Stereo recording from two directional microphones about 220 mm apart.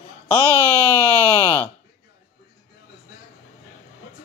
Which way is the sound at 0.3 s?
10° left (ahead or behind).